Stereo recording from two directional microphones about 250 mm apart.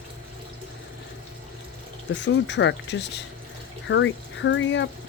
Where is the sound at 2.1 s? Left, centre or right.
Left.